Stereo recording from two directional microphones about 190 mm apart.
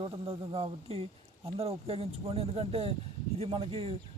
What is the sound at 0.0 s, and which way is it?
Speech, 30° right (ahead or behind).